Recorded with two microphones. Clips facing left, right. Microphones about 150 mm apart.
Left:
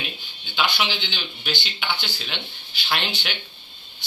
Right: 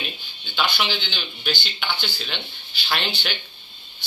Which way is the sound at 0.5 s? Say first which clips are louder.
Even; 10° left (ahead or behind).